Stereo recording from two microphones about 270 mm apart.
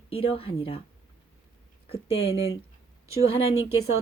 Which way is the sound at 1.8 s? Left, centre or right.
Left.